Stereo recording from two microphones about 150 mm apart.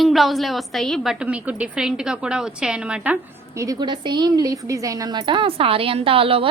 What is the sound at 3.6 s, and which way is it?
Speech, 25° right (ahead or behind).